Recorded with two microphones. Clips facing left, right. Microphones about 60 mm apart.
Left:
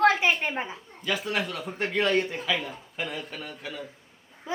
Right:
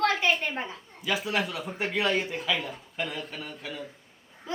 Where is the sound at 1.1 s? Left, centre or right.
Centre.